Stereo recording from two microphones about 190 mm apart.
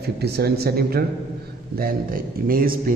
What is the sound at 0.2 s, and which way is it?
Speech, 55° right (ahead or behind).